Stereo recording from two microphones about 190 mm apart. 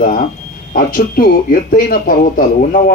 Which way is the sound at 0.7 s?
45° left (ahead or behind).